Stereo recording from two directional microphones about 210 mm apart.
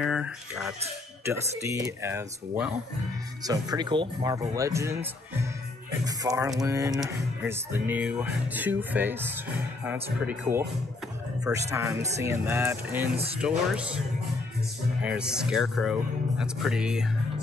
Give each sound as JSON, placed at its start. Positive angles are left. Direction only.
{"t": 0.0, "sound": "speech", "side_deg": -5}
{"t": 1.2, "sound": "music", "side_deg": -15}
{"t": 11.5, "sound": "speech", "side_deg": -5}
{"t": 12.2, "sound": "music", "side_deg": -10}
{"t": 13.4, "sound": "speech", "side_deg": -5}